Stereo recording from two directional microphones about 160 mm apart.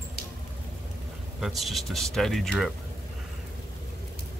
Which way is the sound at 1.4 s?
Centre (ahead or behind).